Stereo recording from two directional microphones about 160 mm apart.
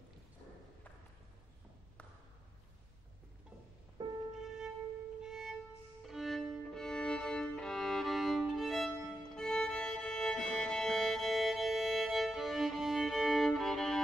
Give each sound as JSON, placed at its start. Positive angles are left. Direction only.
{"t": 4.0, "sound": "music", "side_deg": -25}
{"t": 4.4, "sound": "music", "side_deg": -5}
{"t": 5.2, "sound": "violin", "side_deg": -5}
{"t": 6.0, "sound": "music", "side_deg": 0}